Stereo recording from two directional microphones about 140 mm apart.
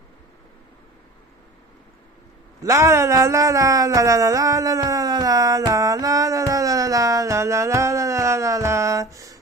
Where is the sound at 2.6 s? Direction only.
20° right (ahead or behind).